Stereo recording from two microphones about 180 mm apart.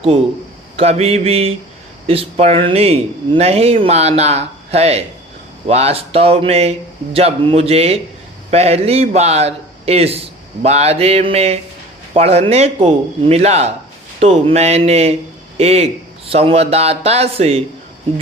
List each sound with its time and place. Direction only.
0.8 s a man's voice: 35° right (ahead or behind)